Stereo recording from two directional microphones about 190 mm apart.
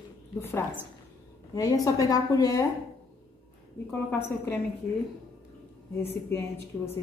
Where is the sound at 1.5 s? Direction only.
20° left (ahead or behind).